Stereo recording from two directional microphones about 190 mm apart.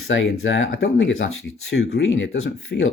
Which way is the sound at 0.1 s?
85° left.